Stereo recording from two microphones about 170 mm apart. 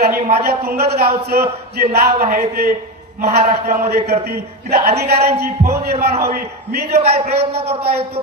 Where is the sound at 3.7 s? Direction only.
70° right (ahead or behind).